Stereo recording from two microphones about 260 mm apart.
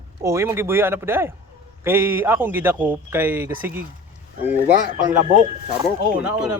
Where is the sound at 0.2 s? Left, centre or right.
Centre.